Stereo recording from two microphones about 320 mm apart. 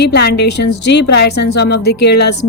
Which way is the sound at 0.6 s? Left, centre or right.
Left.